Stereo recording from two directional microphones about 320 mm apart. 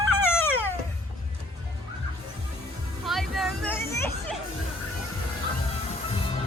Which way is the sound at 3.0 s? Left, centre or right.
Centre.